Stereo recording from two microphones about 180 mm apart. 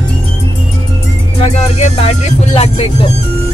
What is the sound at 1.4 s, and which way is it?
Speech, 35° left (ahead or behind).